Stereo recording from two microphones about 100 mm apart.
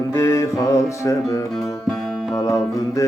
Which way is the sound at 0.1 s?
30° left (ahead or behind).